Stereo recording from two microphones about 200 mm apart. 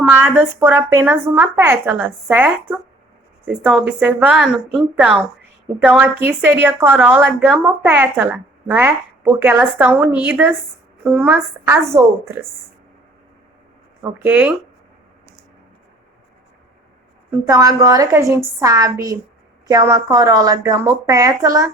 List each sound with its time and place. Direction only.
0.1 s a woman's voice: 10° right (ahead or behind)
14.2 s a woman's voice: 10° right (ahead or behind)
17.4 s a woman's voice: 15° right (ahead or behind)